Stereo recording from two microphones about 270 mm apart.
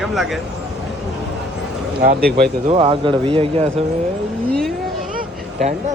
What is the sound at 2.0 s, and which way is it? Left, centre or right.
Speech, right.